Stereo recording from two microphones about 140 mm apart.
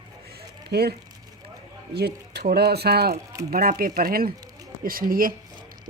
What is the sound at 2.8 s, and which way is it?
Speech, 90° right.